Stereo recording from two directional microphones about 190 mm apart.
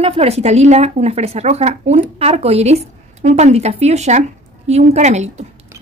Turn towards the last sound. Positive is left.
turn(degrees=-35)  # may be behind; listen again after turning